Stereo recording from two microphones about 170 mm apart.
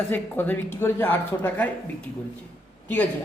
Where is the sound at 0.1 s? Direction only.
10° left (ahead or behind).